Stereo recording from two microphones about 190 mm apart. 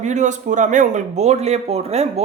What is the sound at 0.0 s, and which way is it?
Speech, 40° right (ahead or behind).